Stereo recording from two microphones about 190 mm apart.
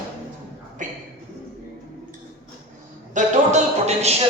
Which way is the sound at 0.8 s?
40° right (ahead or behind).